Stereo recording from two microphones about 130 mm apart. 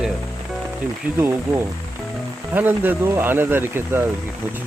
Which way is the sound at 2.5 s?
15° right (ahead or behind).